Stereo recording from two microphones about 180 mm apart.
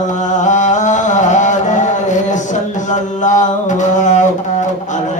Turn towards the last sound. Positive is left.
turn(degrees=40)  # may be behind; listen again after turning